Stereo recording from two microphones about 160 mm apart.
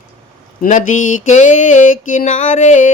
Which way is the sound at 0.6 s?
50° left (ahead or behind).